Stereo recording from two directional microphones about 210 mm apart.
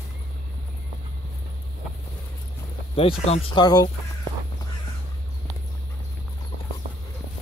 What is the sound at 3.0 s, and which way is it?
Speech, 30° left (ahead or behind).